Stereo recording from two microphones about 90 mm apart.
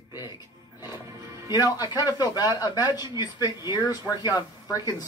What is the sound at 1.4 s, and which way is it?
Speech, 45° left (ahead or behind).